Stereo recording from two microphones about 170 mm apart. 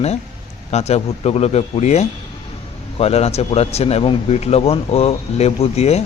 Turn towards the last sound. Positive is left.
turn(degrees=40)  # may be behind; listen again after turning